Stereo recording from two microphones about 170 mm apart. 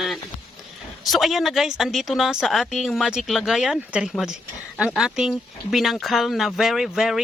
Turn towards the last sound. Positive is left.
turn(degrees=0)  # may be behind; listen again after turning